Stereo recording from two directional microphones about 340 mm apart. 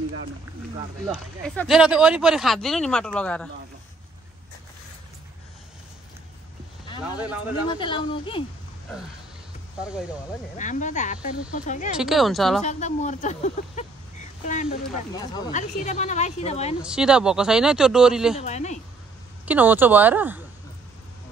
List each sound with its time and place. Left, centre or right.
1.0 s speech: centre
7.2 s speech: centre
7.7 s speech: centre
10.6 s speech: left
12.0 s speech: centre
12.6 s speech: left
16.8 s speech: centre
18.4 s speech: centre
19.4 s speech: centre